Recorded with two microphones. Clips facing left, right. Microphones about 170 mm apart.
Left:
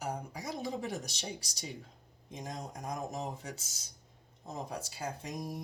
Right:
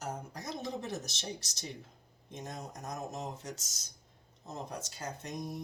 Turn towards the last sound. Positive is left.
turn(degrees=10)  # may be behind; listen again after turning